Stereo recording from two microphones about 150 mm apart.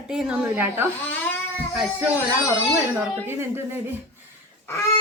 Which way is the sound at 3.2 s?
15° right (ahead or behind).